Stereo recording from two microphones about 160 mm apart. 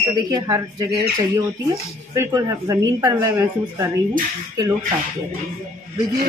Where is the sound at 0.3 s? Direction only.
20° right (ahead or behind).